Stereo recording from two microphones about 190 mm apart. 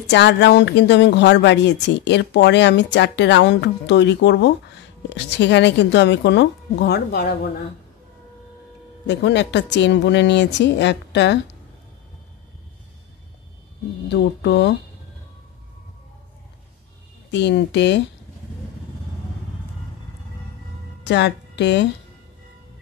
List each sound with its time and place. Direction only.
0.1 s speech: 65° left (ahead or behind)
9.0 s speech: 65° left (ahead or behind)
14.1 s speech: 65° left (ahead or behind)
17.3 s speech: 65° left (ahead or behind)
21.0 s a woman's voice: 65° left (ahead or behind)